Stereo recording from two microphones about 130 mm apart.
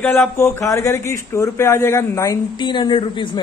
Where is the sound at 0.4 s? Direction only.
25° left (ahead or behind).